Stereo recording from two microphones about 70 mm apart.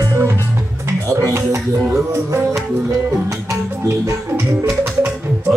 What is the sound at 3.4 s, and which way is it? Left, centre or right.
Music, right.